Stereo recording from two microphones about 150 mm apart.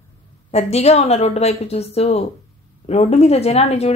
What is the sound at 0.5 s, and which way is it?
Speech, 45° left (ahead or behind).